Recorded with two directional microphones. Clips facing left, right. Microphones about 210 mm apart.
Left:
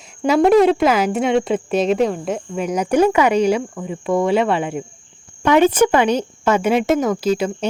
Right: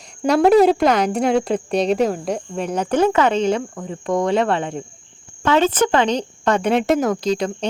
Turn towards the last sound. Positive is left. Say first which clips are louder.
# left 2 dB
turn(degrees=5)  # may be behind; listen again after turning